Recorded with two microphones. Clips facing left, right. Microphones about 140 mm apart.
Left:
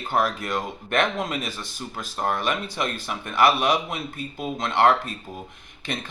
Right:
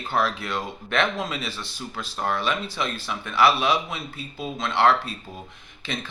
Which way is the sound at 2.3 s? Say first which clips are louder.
Even; 50° left (ahead or behind).